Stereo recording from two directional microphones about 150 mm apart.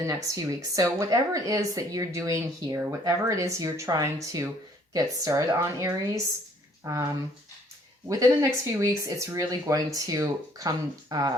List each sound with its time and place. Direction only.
0.0 s speech: 20° right (ahead or behind)
8.0 s speech: 20° right (ahead or behind)